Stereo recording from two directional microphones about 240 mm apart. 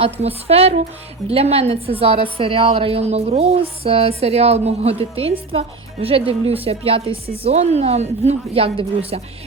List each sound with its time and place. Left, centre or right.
0.0 s a woman's voice: right